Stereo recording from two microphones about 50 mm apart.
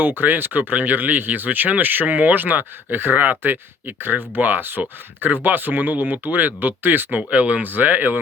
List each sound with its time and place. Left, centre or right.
0.0 s speech: right
7.2 s speech: right